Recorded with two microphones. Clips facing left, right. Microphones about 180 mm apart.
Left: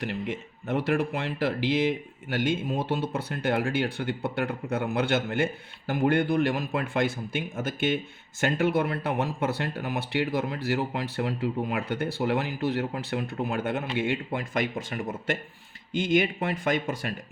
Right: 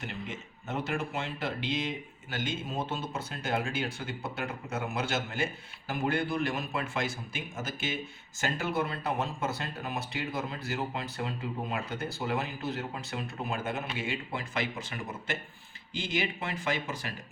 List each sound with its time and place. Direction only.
0.1 s speech: 60° left (ahead or behind)
15.9 s speech: 55° left (ahead or behind)